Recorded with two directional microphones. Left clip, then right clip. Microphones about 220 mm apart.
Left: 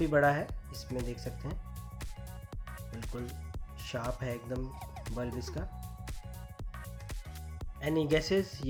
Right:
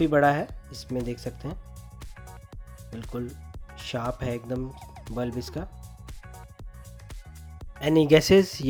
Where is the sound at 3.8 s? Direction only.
35° right (ahead or behind).